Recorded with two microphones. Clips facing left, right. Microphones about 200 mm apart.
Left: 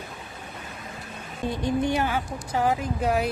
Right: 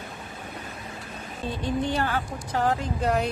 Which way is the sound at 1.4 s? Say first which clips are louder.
Left 3 dB; 15° left (ahead or behind).